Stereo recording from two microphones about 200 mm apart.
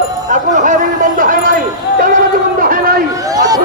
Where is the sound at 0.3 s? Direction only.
40° right (ahead or behind).